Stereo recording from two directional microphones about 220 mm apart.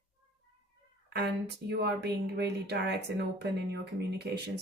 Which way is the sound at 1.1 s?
50° right (ahead or behind).